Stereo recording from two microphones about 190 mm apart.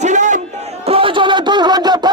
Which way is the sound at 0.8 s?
30° right (ahead or behind).